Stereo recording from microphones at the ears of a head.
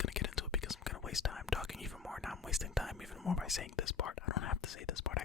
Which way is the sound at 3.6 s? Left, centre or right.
Left.